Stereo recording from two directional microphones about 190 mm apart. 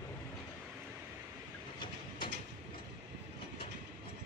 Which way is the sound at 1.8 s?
25° left (ahead or behind).